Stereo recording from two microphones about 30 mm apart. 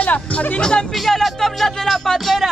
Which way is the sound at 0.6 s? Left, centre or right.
Left.